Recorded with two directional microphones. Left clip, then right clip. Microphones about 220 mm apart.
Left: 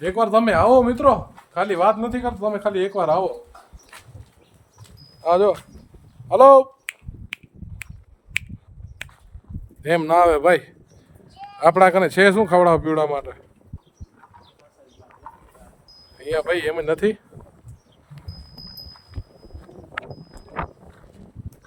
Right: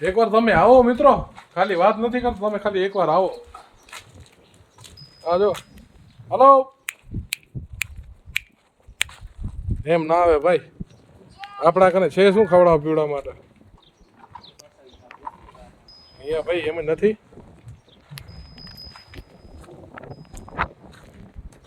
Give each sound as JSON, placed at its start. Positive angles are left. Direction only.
{"t": 0.0, "sound": "a man's voice", "side_deg": 0}
{"t": 5.2, "sound": "speech", "side_deg": 15}
{"t": 9.8, "sound": "speech", "side_deg": 25}
{"t": 11.6, "sound": "speech", "side_deg": 15}
{"t": 16.2, "sound": "speech", "side_deg": 15}